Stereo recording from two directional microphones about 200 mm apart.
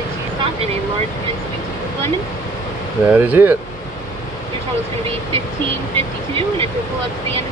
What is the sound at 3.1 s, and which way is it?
Speech, 10° right (ahead or behind).